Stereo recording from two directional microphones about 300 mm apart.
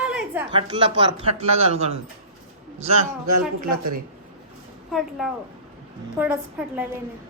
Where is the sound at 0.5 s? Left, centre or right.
Centre.